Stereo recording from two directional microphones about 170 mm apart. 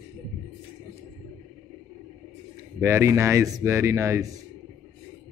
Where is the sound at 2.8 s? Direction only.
15° right (ahead or behind).